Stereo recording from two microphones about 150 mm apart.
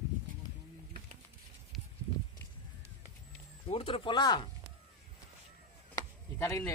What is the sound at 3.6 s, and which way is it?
Speech, 35° left (ahead or behind).